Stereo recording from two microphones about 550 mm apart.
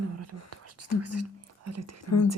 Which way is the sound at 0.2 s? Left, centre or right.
Right.